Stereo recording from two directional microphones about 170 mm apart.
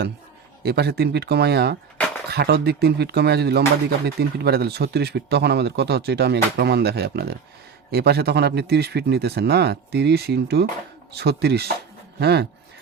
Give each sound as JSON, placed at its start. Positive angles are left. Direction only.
{"t": 0.6, "sound": "speech", "side_deg": -70}